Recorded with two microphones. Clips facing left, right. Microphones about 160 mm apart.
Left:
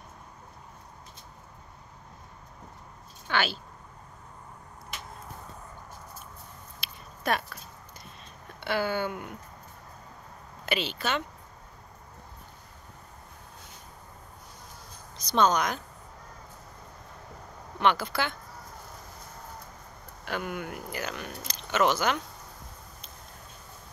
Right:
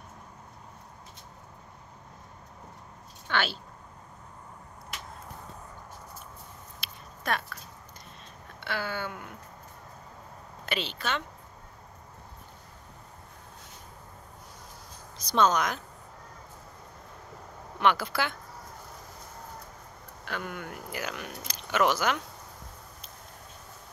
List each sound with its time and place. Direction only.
3.3 s speech: 5° left (ahead or behind)
6.8 s a sound: 10° left (ahead or behind)
8.6 s a sound: 15° left (ahead or behind)
10.6 s speech: 5° left (ahead or behind)
15.1 s speech: 5° right (ahead or behind)
17.7 s speech: 5° right (ahead or behind)
20.2 s speech: 10° left (ahead or behind)
20.9 s speech: 5° right (ahead or behind)